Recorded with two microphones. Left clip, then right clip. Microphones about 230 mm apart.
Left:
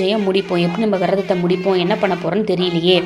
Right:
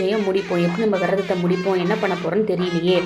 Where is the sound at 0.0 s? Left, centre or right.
Left.